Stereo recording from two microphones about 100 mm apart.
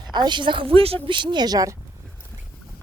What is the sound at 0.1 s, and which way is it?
A woman's voice, 50° right (ahead or behind).